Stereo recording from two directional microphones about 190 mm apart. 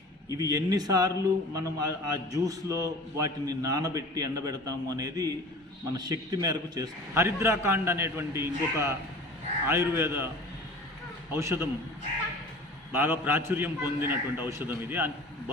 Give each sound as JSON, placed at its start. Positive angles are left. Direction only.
{"t": 0.3, "sound": "a man's voice", "side_deg": -20}
{"t": 11.3, "sound": "a man's voice", "side_deg": -15}
{"t": 12.9, "sound": "a man's voice", "side_deg": -10}